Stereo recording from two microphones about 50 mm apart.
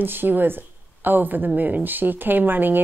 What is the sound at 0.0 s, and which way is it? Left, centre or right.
A woman's voice, right.